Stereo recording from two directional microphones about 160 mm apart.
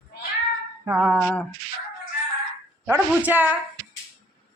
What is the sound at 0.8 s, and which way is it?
Speech, 10° right (ahead or behind).